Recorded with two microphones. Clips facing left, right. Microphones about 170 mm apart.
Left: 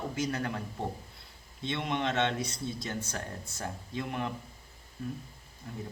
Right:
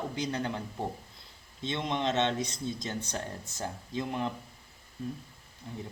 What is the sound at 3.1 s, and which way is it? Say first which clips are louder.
A man's voice: right 2 dB; 20° right (ahead or behind).